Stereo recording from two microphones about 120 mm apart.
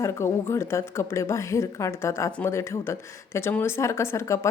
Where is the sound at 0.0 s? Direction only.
25° left (ahead or behind).